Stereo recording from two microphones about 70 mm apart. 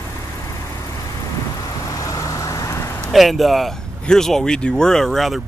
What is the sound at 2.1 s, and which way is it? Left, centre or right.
Vehicle, left.